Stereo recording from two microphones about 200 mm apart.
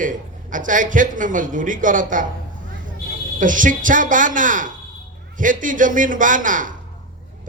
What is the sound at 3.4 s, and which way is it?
Speech, 40° right (ahead or behind).